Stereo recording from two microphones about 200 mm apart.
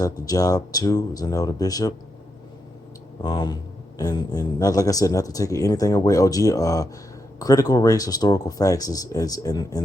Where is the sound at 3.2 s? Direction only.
20° left (ahead or behind).